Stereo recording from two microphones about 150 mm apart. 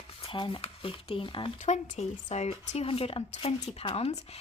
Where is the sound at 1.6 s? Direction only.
50° left (ahead or behind).